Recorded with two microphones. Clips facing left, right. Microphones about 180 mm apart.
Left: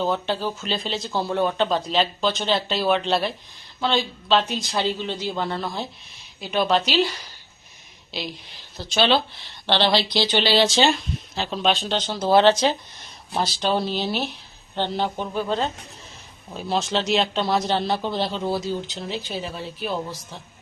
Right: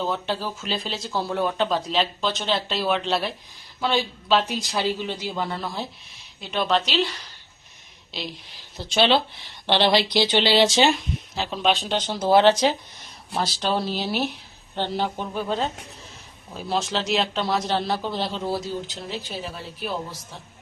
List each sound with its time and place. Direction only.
0.0 s a man's voice: centre (ahead or behind)
8.1 s a man's voice: centre (ahead or behind)
8.8 s speech: 25° right (ahead or behind)
13.3 s a man's voice: centre (ahead or behind)